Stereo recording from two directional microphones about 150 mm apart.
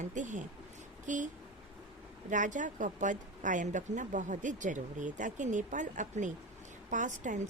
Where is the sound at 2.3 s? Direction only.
55° right (ahead or behind).